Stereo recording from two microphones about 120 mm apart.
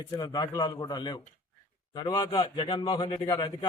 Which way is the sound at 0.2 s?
35° left (ahead or behind).